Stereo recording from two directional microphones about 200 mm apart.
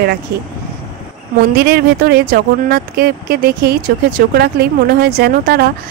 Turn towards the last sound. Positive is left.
turn(degrees=-50)  # may be behind; listen again after turning